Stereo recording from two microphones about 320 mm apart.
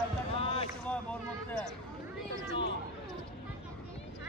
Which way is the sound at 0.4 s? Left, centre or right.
Centre.